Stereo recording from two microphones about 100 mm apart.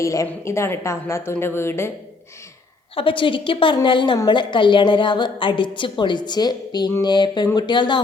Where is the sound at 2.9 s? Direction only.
60° left (ahead or behind).